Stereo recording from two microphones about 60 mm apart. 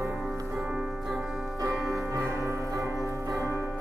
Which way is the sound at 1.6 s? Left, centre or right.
Right.